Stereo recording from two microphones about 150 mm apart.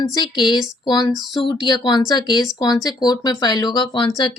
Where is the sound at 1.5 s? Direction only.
30° left (ahead or behind).